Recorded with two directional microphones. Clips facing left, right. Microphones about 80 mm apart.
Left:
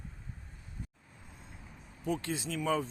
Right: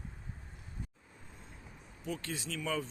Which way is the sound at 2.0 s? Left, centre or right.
Left.